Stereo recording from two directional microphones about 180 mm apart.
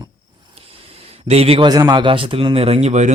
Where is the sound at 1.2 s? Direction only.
35° right (ahead or behind).